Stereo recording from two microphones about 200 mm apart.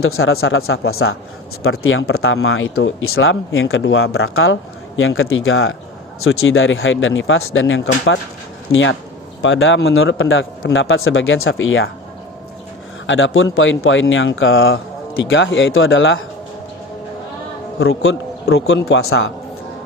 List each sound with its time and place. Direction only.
0.0 s speech: 90° left
13.1 s speech: 70° left (ahead or behind)
15.2 s speech: 70° left (ahead or behind)
17.7 s a man's voice: 65° left (ahead or behind)
18.9 s speech: 90° left